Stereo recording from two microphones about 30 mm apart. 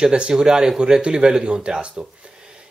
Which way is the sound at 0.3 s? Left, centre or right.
Right.